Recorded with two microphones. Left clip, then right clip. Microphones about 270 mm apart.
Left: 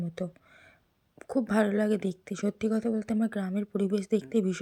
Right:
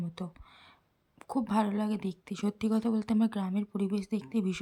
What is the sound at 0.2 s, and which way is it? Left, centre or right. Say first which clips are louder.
Speech: left 7 dB; centre.